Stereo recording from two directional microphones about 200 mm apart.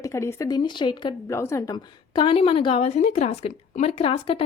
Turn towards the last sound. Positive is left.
turn(degrees=30)  # may be behind; listen again after turning